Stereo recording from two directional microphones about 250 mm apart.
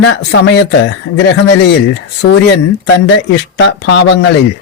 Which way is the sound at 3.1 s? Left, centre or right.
Left.